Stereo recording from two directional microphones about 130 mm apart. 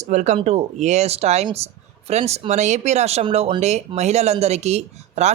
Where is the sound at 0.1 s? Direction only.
65° right (ahead or behind).